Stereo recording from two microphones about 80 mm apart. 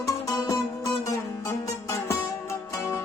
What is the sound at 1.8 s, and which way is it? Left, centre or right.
Music, left.